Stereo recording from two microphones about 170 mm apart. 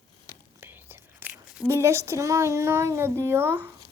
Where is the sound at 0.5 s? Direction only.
10° right (ahead or behind).